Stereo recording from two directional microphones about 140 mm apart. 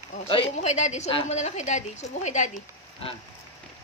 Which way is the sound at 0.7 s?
55° left (ahead or behind).